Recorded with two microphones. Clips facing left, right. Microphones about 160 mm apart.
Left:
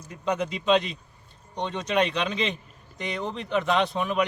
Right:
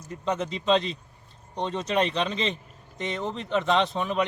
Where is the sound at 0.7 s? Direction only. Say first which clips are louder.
Left 1 dB; 30° right (ahead or behind).